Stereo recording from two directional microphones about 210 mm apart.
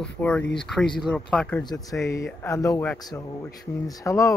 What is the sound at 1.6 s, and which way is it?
Speech, 20° left (ahead or behind).